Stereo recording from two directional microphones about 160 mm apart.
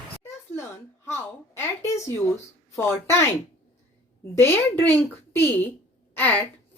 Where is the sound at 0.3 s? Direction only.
15° left (ahead or behind).